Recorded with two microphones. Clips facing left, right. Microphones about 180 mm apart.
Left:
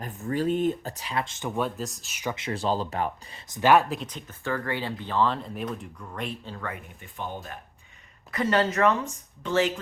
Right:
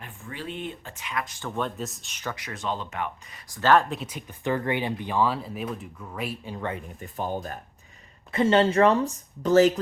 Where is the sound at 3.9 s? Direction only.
5° right (ahead or behind).